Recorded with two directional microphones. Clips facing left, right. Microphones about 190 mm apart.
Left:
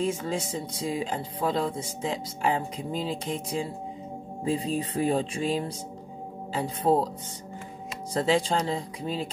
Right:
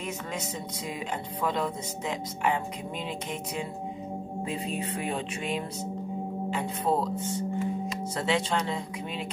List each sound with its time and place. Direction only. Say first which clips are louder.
0.0 s speech: left 6 dB; 30° left (ahead or behind)
4.5 s music: left 7 dB; 35° left (ahead or behind)